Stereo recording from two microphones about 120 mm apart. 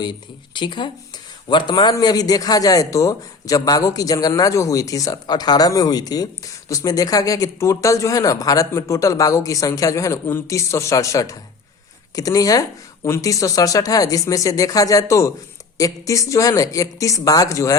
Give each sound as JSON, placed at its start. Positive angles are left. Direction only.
{"t": 0.0, "sound": "a man's voice", "side_deg": 40}